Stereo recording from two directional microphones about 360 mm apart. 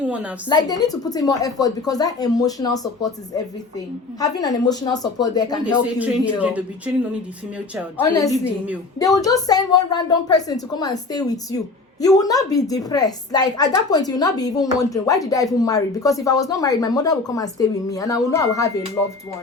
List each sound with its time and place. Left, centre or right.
0.0 s a woman's voice: centre
0.4 s a woman's voice: centre
6.0 s a man's voice: centre
7.9 s a man's voice: centre